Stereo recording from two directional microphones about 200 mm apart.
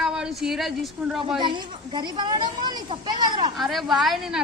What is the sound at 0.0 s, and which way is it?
A woman's voice, 5° right (ahead or behind).